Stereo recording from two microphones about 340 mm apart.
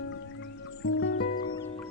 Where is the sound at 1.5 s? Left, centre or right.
Centre.